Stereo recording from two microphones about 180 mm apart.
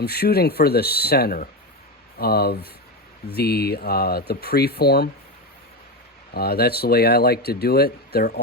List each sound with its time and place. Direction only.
0.0 s speech: 60° left (ahead or behind)
6.3 s speech: 60° left (ahead or behind)